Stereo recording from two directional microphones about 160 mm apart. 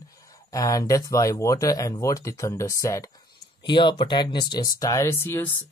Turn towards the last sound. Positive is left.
turn(degrees=15)  # may be behind; listen again after turning